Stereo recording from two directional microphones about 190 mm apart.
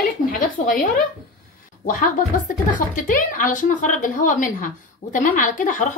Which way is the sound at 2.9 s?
45° left (ahead or behind).